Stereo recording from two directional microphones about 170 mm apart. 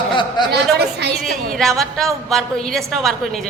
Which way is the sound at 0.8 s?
75° right (ahead or behind).